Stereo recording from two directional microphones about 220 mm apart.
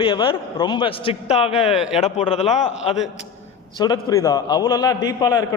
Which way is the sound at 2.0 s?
30° left (ahead or behind).